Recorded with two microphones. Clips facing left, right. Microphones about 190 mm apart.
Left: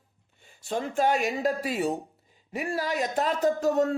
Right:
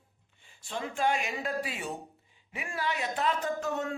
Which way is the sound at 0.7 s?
40° left (ahead or behind).